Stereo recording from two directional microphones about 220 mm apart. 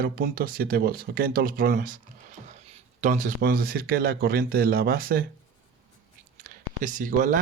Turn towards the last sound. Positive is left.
turn(degrees=-35)  # may be behind; listen again after turning